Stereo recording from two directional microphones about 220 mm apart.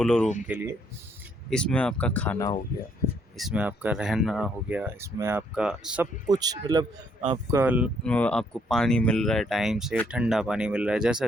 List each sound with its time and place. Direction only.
0.0 s speech: 5° left (ahead or behind)
0.4 s speech: 10° right (ahead or behind)
1.5 s speech: 5° left (ahead or behind)
6.2 s speech: 15° right (ahead or behind)
8.0 s speech: 5° left (ahead or behind)